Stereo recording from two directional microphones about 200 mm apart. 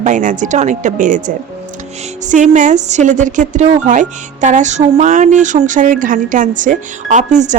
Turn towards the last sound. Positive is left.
turn(degrees=-40)  # may be behind; listen again after turning